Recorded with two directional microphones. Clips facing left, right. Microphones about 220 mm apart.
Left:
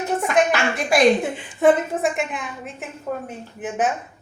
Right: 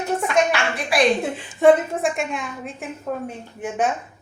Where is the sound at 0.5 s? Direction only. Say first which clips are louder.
Left 2 dB; 45° left (ahead or behind).